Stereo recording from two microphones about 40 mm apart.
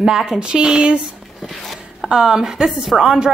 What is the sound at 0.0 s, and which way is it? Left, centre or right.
Speech, centre.